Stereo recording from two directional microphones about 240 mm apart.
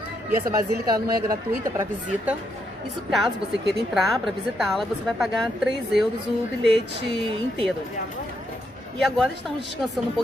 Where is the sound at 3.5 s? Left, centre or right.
Right.